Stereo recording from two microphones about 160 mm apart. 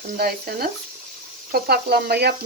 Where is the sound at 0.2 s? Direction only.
70° right (ahead or behind).